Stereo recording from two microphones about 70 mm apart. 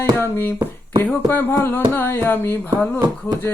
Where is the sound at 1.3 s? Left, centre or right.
Left.